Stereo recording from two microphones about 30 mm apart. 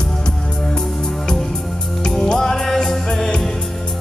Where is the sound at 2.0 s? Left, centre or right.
Left.